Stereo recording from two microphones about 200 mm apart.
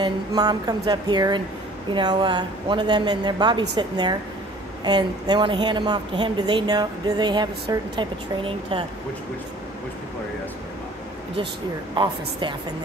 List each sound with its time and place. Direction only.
0.0 s a woman's voice: 20° right (ahead or behind)
11.9 s a woman's voice: 25° right (ahead or behind)